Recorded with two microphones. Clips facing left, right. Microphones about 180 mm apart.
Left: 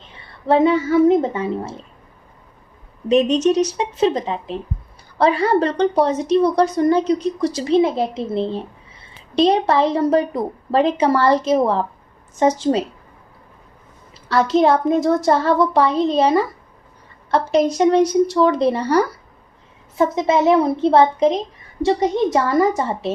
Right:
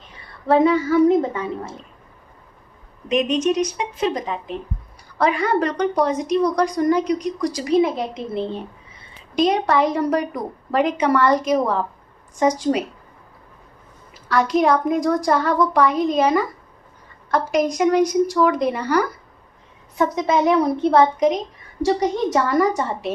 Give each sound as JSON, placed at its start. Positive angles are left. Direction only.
{"t": 0.5, "sound": "a woman's voice", "side_deg": 30}
{"t": 3.1, "sound": "a woman's voice", "side_deg": 35}
{"t": 14.1, "sound": "a woman's voice", "side_deg": 30}
{"t": 17.5, "sound": "a woman's voice", "side_deg": 30}